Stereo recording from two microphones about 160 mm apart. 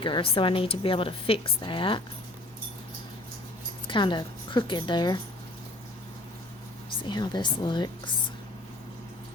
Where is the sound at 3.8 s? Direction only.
30° left (ahead or behind).